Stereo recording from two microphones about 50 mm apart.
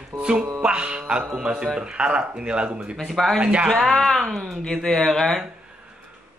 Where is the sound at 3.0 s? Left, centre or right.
Centre.